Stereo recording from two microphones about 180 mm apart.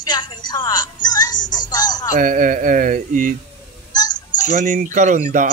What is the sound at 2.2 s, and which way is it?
A man's voice, 50° right (ahead or behind).